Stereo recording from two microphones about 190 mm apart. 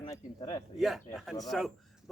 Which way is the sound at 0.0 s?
25° left (ahead or behind).